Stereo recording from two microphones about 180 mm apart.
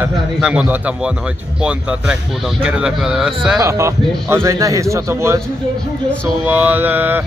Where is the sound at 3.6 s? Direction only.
15° right (ahead or behind).